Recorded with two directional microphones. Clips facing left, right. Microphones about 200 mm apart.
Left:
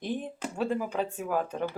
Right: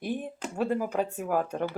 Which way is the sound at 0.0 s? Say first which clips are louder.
Even; 10° right (ahead or behind).